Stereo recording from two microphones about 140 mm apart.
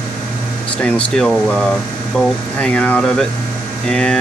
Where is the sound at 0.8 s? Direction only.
5° left (ahead or behind).